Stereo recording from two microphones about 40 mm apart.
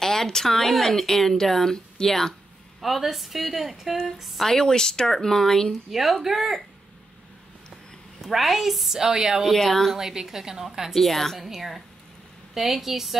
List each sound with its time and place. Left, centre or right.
0.0 s speech: centre
2.8 s a woman's voice: centre
4.6 s speech: centre
5.7 s a woman's voice: centre
8.2 s a woman's voice: centre
9.4 s a woman's voice: centre
9.9 s a woman's voice: centre
11.0 s a woman's voice: centre